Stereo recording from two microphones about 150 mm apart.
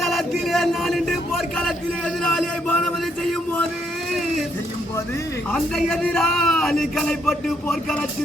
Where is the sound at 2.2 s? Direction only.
5° left (ahead or behind).